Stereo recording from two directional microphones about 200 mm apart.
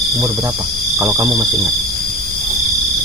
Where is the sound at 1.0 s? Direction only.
15° right (ahead or behind).